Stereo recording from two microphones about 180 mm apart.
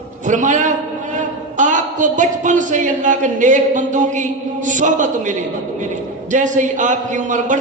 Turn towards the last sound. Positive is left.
turn(degrees=-45)  # may be behind; listen again after turning